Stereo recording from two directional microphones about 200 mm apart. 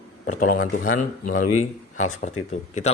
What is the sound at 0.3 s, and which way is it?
Speech, 40° left (ahead or behind).